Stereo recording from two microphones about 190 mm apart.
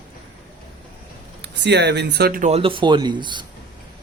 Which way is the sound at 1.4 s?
65° right (ahead or behind).